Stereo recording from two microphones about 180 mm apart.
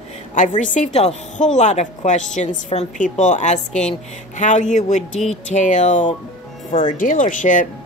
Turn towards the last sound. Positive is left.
turn(degrees=45)  # may be behind; listen again after turning